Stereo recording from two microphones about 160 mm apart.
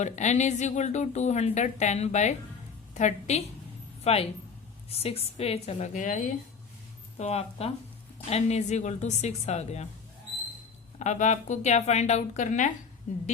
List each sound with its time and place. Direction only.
0.0 s a woman's voice: 50° left (ahead or behind)
7.2 s a woman's voice: 40° left (ahead or behind)
11.0 s speech: 50° left (ahead or behind)